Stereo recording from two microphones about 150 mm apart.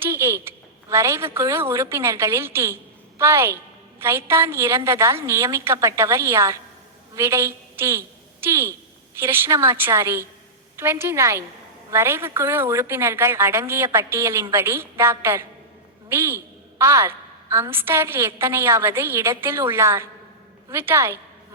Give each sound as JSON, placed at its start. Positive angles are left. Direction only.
{"t": 0.0, "sound": "a woman's voice", "side_deg": -20}